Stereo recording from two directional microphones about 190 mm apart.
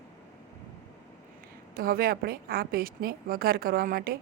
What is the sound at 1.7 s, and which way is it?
Speech, 50° right (ahead or behind).